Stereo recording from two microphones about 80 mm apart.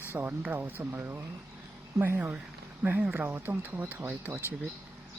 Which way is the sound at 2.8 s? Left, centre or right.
Right.